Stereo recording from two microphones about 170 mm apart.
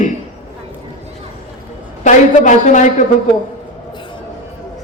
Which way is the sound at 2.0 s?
45° left (ahead or behind).